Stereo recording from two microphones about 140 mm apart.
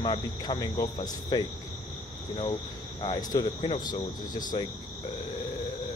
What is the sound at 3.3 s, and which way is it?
Speech, 40° left (ahead or behind).